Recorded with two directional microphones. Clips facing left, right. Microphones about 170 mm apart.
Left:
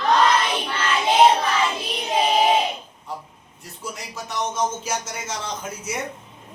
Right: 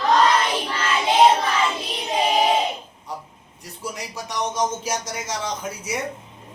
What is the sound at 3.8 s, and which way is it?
Speech, 15° right (ahead or behind).